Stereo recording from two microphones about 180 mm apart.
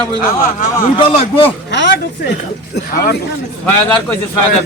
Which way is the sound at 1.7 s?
75° left (ahead or behind).